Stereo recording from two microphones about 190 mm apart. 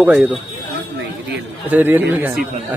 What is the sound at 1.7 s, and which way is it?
Speech, 10° right (ahead or behind).